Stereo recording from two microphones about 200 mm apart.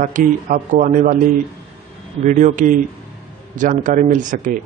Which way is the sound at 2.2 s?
40° right (ahead or behind).